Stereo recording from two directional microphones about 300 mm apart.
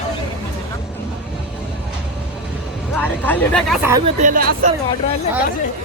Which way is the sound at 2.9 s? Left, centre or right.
Centre.